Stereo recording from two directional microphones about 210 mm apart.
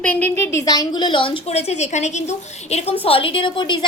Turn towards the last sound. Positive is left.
turn(degrees=20)  # may be behind; listen again after turning